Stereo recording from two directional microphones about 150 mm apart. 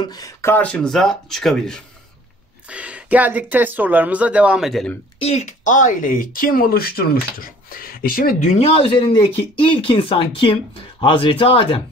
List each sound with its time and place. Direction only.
0.0 s speech: 25° left (ahead or behind); by 1.8 s centre (ahead or behind)
2.7 s speech: 10° right (ahead or behind)
5.2 s speech: 50° left (ahead or behind)